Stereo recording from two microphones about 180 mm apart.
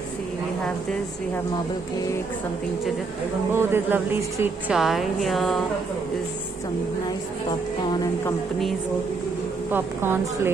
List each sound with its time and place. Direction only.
3.5 s speech: 15° right (ahead or behind)
4.7 s speech: centre (ahead or behind)
7.9 s speech: 20° left (ahead or behind)
9.7 s speech: 10° right (ahead or behind)